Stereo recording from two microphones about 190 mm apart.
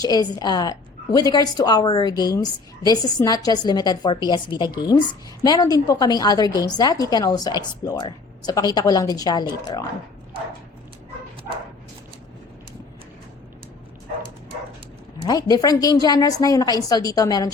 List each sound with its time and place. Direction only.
0.0 s a woman's voice: 20° left (ahead or behind)
15.3 s a woman's voice: 20° left (ahead or behind)